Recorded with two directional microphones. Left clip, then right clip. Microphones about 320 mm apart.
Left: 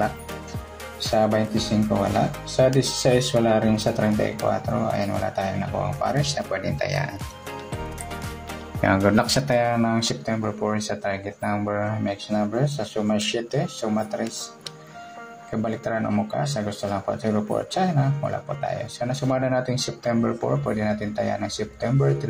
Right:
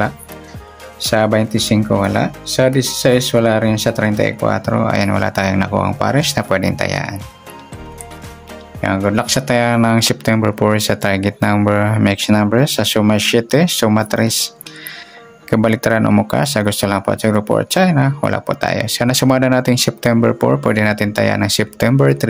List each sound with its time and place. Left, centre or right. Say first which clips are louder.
1.1 s speech: right 7 dB; right
8.8 s speech: right 3 dB; centre; by 14.2 s right
15.6 s speech: right 11 dB; right